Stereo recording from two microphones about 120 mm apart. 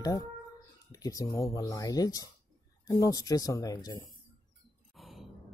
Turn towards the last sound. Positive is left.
turn(degrees=0)  # may be behind; listen again after turning